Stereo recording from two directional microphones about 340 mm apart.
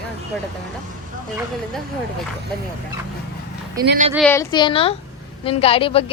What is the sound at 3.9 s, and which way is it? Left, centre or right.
Speech, right.